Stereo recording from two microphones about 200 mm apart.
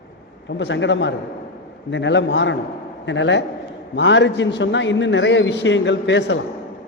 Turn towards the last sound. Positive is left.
turn(degrees=65)  # may be behind; listen again after turning